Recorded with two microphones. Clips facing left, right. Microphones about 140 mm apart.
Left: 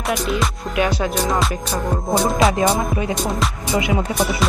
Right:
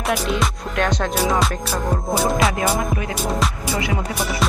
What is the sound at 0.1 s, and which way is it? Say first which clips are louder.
Music: even; centre (ahead or behind).